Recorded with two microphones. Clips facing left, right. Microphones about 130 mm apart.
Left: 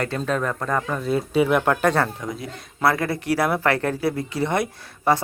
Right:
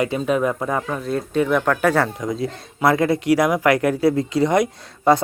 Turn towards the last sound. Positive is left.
turn(degrees=-20)  # may be behind; listen again after turning